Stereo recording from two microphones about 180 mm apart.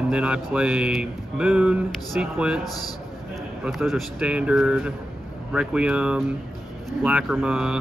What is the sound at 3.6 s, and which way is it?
Speech, centre (ahead or behind).